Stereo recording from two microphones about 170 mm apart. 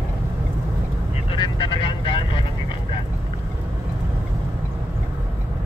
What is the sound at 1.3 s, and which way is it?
Vehicle, 25° left (ahead or behind).